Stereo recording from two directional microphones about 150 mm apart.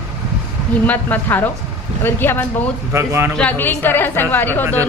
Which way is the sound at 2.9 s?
15° right (ahead or behind).